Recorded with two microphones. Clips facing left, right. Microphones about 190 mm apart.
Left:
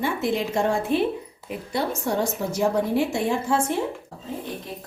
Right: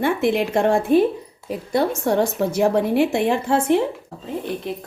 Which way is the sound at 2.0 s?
65° right (ahead or behind).